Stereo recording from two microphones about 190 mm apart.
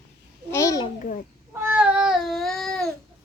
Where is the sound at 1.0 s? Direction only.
45° left (ahead or behind).